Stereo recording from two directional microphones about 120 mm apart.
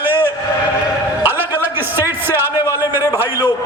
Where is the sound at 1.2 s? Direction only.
15° right (ahead or behind).